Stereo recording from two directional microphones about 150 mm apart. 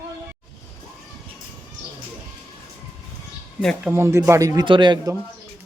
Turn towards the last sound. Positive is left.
turn(degrees=-30)  # may be behind; listen again after turning